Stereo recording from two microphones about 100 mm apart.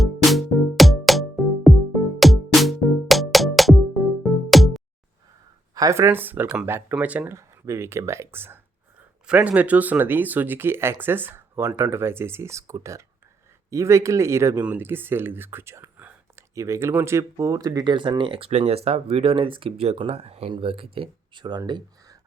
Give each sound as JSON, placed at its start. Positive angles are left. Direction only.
{"t": 0.0, "sound": "music", "side_deg": 0}
{"t": 5.7, "sound": "speech", "side_deg": -30}
{"t": 7.3, "sound": "speech", "side_deg": -30}
{"t": 9.0, "sound": "speech", "side_deg": -15}
{"t": 16.0, "sound": "whispering", "side_deg": -15}
{"t": 16.6, "sound": "speech", "side_deg": -30}
{"t": 20.5, "sound": "speech", "side_deg": -65}